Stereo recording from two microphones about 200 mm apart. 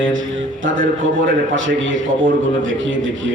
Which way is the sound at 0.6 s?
45° right (ahead or behind).